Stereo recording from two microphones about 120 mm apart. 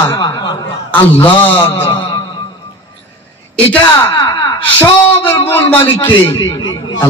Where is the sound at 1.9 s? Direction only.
35° left (ahead or behind).